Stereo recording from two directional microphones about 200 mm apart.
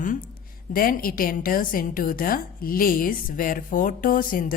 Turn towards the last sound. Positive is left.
turn(degrees=45)  # may be behind; listen again after turning